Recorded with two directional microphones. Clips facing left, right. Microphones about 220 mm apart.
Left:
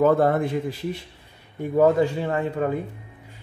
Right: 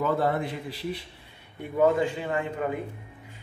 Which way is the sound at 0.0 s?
50° left (ahead or behind).